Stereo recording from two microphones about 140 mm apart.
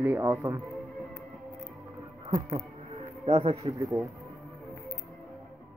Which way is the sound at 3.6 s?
25° right (ahead or behind).